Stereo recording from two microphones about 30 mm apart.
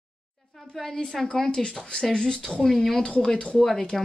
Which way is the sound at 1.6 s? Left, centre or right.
Left.